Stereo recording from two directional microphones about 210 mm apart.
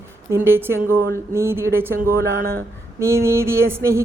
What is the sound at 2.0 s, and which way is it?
Speech, 45° right (ahead or behind).